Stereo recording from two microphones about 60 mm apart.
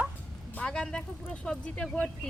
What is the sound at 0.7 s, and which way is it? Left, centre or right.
Speech, centre.